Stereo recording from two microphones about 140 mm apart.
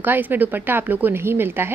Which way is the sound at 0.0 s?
15° right (ahead or behind).